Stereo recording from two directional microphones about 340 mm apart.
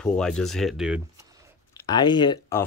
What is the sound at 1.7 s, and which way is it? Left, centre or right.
Speech, centre.